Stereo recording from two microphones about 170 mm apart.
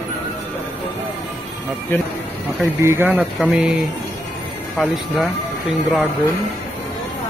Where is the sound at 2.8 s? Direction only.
15° right (ahead or behind).